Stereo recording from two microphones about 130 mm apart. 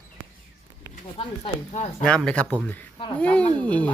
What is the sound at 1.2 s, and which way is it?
Speech, 50° left (ahead or behind).